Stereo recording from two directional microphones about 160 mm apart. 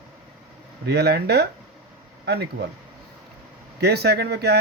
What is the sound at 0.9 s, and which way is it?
Speech, 90° right.